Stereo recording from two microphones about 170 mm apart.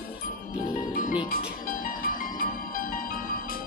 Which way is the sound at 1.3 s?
60° left (ahead or behind).